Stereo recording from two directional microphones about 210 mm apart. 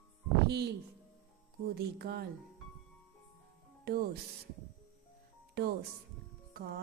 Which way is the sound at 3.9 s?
45° right (ahead or behind).